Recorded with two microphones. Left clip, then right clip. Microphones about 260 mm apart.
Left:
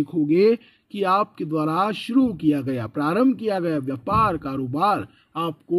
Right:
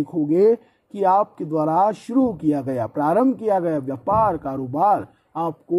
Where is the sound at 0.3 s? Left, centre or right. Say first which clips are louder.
Right 2 dB; left.